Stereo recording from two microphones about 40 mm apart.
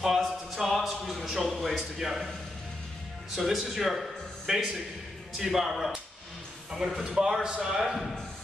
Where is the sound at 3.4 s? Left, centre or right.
Centre.